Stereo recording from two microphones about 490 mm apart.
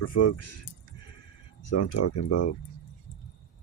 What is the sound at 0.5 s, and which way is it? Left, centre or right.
Sheep, left.